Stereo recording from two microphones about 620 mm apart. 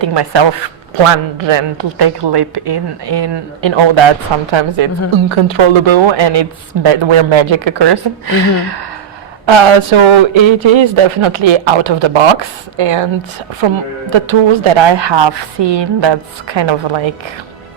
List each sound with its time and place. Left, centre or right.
0.0 s speech: right
9.5 s speech: right